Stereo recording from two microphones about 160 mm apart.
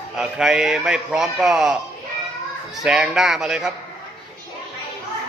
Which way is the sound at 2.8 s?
5° right (ahead or behind).